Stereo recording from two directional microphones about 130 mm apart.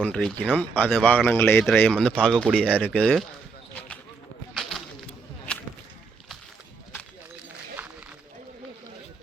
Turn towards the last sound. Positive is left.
turn(degrees=-10)  # may be behind; listen again after turning